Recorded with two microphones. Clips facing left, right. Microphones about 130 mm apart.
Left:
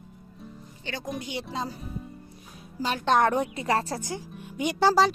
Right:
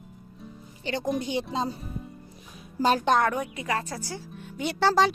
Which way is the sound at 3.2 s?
30° left (ahead or behind).